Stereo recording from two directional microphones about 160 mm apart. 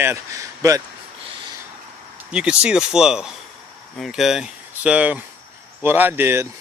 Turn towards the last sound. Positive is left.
turn(degrees=-15)  # may be behind; listen again after turning